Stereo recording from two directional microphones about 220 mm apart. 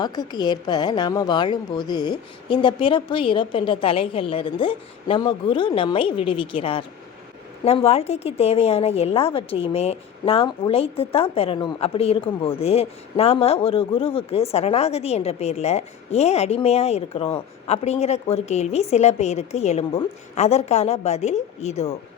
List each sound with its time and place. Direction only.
0.0 s a woman's voice: 20° left (ahead or behind)